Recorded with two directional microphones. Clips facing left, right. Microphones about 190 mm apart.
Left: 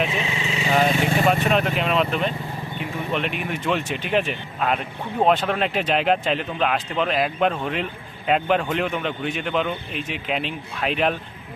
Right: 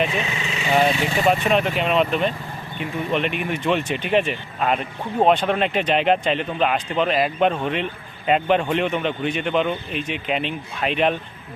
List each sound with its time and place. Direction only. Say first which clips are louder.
0.2 s vehicle: left 1 dB; 25° left (ahead or behind)
1.0 s speech: even; centre (ahead or behind)